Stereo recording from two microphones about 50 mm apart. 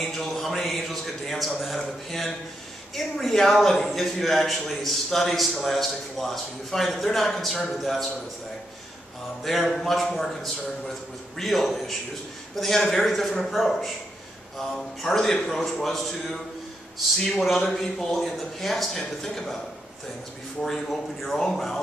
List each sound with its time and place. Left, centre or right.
0.0 s a man's voice: centre
9.4 s a man's voice: centre
20.6 s a man's voice: centre